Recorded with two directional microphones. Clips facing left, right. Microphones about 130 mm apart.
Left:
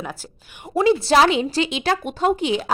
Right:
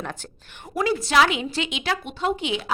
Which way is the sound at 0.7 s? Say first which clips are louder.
Left 6 dB; 25° left (ahead or behind).